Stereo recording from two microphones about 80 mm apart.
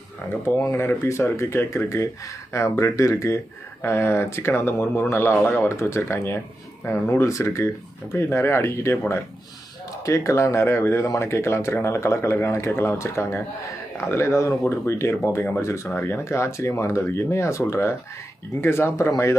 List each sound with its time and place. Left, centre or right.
0.3 s speech: left